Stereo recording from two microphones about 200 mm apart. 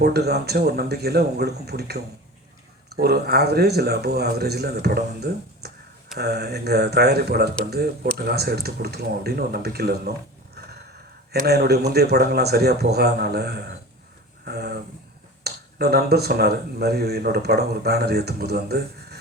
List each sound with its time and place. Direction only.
0.0 s speech: 55° right (ahead or behind)
11.3 s speech: 55° right (ahead or behind)